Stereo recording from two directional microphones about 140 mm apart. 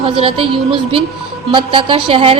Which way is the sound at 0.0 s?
40° right (ahead or behind).